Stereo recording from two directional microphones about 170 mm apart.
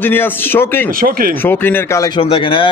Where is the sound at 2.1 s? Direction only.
30° left (ahead or behind).